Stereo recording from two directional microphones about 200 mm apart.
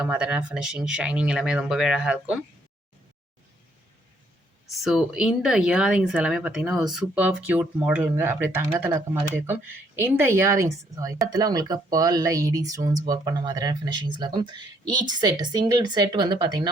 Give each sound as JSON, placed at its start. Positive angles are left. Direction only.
{"t": 0.0, "sound": "speech", "side_deg": -5}
{"t": 4.6, "sound": "speech", "side_deg": 0}